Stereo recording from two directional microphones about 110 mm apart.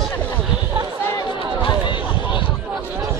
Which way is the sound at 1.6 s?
45° left (ahead or behind).